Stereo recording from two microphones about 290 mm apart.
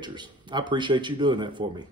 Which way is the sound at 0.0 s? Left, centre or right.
Centre.